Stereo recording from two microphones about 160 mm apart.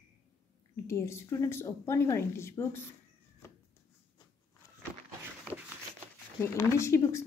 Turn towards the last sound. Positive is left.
turn(degrees=20)  # may be behind; listen again after turning